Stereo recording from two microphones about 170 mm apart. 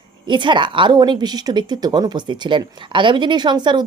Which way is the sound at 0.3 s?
25° right (ahead or behind).